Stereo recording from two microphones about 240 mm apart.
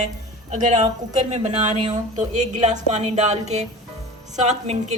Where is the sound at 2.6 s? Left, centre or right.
Right.